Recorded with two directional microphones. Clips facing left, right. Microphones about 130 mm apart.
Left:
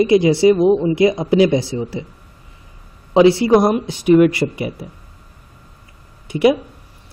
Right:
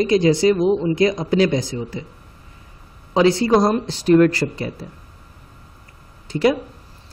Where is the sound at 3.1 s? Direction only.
25° left (ahead or behind).